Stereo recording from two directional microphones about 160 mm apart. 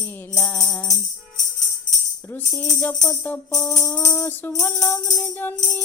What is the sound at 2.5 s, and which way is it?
Music, 15° left (ahead or behind).